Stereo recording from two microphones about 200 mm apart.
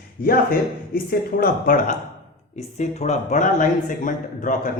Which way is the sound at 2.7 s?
35° left (ahead or behind).